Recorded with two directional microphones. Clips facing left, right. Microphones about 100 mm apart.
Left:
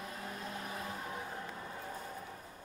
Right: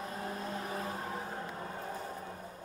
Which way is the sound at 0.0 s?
30° right (ahead or behind).